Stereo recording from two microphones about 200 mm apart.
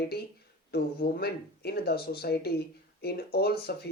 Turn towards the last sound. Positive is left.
turn(degrees=50)  # may be behind; listen again after turning